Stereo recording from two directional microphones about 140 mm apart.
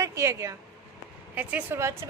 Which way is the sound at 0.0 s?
20° right (ahead or behind).